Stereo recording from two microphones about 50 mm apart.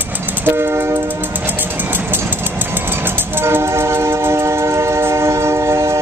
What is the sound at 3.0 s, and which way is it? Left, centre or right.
Train, right.